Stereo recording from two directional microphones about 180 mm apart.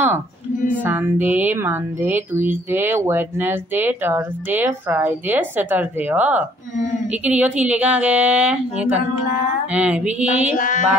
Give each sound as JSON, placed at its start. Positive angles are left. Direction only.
{"t": 0.8, "sound": "speech", "side_deg": -10}
{"t": 10.5, "sound": "mantra", "side_deg": 45}